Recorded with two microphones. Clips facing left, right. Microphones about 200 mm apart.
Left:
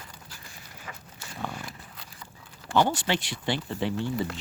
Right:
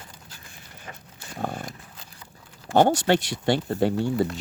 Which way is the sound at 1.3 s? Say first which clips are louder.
Right 5 dB; 50° right (ahead or behind).